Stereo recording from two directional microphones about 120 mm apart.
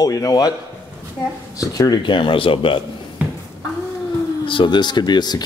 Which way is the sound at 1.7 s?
30° left (ahead or behind).